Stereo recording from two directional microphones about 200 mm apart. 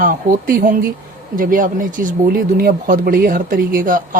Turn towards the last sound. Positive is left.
turn(degrees=-45)  # may be behind; listen again after turning